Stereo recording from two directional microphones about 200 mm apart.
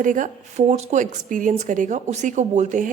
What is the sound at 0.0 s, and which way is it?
Speech, 40° right (ahead or behind).